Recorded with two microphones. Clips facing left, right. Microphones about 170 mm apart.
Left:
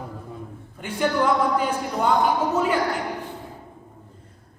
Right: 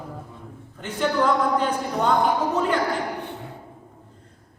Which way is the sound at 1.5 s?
10° left (ahead or behind).